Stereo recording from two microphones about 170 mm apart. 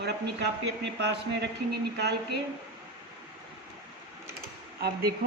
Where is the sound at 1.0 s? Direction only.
90° right.